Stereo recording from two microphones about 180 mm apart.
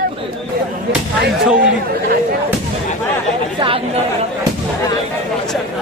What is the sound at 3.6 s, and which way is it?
Speech, 30° right (ahead or behind).